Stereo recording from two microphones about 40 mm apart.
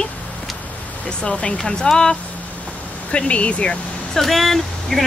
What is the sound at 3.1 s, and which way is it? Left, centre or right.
Speech, left.